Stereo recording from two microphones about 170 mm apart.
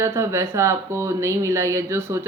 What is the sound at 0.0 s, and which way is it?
Speech, 15° right (ahead or behind).